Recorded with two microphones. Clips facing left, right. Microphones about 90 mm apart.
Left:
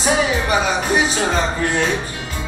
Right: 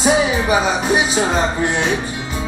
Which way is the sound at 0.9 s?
20° right (ahead or behind).